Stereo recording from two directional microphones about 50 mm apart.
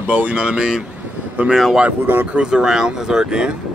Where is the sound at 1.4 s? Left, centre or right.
Right.